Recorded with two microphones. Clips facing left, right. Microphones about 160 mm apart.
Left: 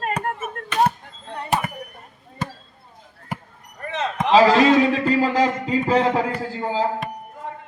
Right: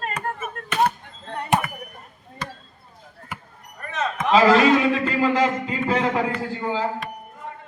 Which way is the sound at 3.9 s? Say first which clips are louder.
Left 2 dB; 35° left (ahead or behind).